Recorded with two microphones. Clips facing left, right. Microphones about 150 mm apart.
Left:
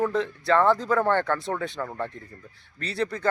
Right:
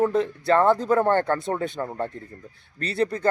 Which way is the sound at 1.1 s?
45° right (ahead or behind).